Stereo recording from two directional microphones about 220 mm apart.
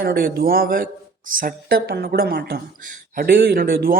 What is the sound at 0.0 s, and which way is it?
Speech, 45° right (ahead or behind).